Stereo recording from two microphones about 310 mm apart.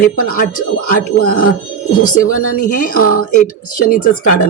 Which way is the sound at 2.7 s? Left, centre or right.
Left.